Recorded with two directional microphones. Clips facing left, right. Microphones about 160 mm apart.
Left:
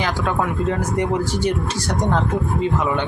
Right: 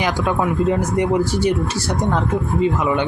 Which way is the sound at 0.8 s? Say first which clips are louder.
Right 3 dB; 10° right (ahead or behind).